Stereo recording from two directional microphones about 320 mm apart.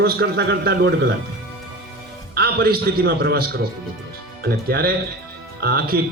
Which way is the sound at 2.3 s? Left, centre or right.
Right.